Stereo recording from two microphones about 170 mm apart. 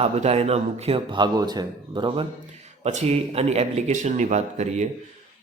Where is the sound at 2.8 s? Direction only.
40° right (ahead or behind).